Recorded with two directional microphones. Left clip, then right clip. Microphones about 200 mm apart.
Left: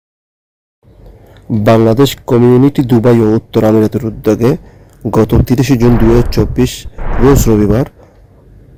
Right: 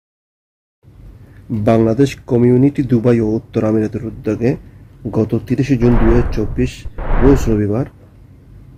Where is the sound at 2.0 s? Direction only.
30° left (ahead or behind).